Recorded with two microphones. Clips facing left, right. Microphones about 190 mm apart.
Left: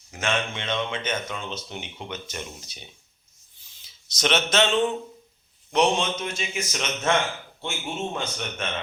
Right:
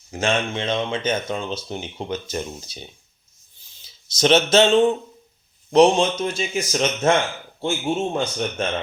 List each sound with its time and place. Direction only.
0.1 s speech: 30° right (ahead or behind)